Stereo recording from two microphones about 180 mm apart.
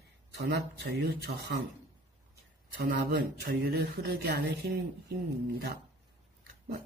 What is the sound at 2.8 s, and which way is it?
Speech, 60° right (ahead or behind).